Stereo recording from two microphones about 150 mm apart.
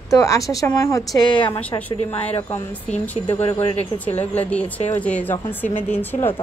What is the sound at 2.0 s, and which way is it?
Speech, 45° left (ahead or behind).